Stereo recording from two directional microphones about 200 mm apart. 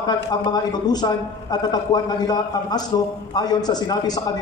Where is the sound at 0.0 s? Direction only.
20° left (ahead or behind).